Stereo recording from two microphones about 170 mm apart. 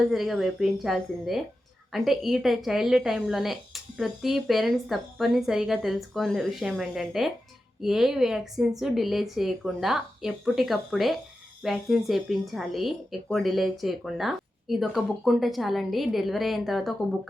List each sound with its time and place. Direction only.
0.1 s a woman's voice: centre (ahead or behind)